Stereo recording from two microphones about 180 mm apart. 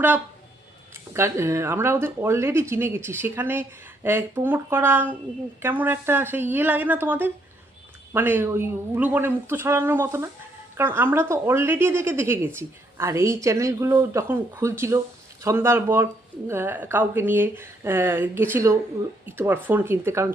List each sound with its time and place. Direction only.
1.1 s speech: 15° right (ahead or behind)